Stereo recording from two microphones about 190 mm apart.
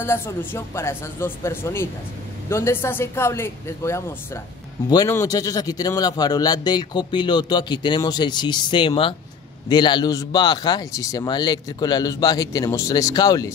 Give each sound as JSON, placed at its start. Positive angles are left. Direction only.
{"t": 0.0, "sound": "a man's voice", "side_deg": 10}